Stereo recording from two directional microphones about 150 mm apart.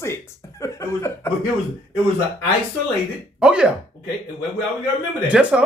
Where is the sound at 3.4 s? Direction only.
5° right (ahead or behind).